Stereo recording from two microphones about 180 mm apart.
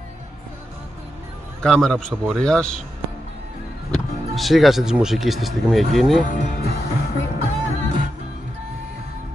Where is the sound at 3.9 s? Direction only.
Centre (ahead or behind).